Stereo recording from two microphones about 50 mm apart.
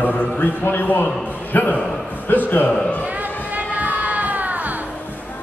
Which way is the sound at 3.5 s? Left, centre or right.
Right.